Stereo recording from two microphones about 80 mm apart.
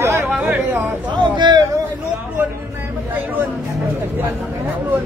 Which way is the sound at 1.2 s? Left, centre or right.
Right.